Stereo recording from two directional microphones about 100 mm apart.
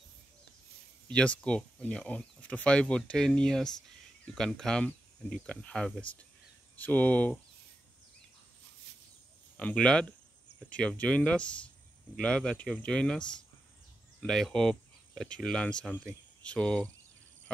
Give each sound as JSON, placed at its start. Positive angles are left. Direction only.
{"t": 1.0, "sound": "speech", "side_deg": 10}
{"t": 9.6, "sound": "speech", "side_deg": 10}
{"t": 14.2, "sound": "speech", "side_deg": 5}